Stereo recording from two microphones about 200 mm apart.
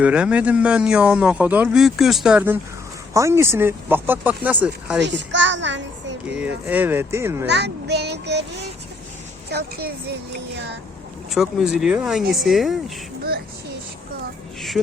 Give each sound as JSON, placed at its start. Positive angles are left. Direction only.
{"t": 0.0, "sound": "speech", "side_deg": -5}
{"t": 5.0, "sound": "a child's voice", "side_deg": -65}
{"t": 6.7, "sound": "speech", "side_deg": -10}
{"t": 7.4, "sound": "a child's voice", "side_deg": -60}
{"t": 9.5, "sound": "a woman's voice", "side_deg": -55}
{"t": 11.3, "sound": "speech", "side_deg": 0}